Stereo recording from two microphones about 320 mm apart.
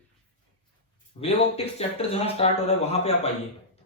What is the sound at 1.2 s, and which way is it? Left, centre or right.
Speech, centre.